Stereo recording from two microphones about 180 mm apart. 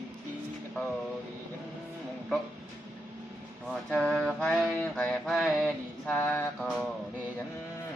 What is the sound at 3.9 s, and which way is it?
Mantra, centre (ahead or behind).